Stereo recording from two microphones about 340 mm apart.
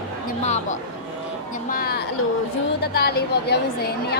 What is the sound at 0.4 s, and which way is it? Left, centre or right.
A woman's voice, centre.